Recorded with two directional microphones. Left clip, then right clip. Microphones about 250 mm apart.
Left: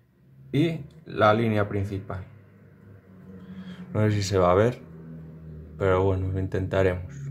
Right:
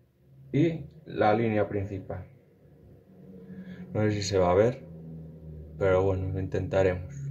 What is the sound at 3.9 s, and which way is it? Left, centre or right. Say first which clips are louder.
Speech: left 1 dB; centre.